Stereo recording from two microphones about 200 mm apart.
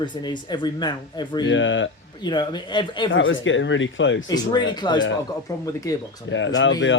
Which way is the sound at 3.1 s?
70° left (ahead or behind).